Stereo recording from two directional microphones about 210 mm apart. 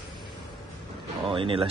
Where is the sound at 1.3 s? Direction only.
25° right (ahead or behind).